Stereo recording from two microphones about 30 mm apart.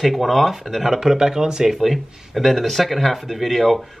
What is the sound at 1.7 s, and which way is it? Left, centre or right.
Speech, centre.